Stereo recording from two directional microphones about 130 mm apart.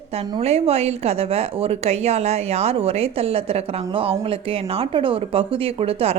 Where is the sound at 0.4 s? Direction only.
50° right (ahead or behind).